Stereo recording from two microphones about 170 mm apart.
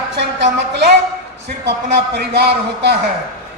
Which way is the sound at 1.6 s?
80° right.